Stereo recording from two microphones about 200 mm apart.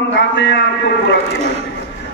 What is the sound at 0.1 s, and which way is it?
Speech, 65° left (ahead or behind).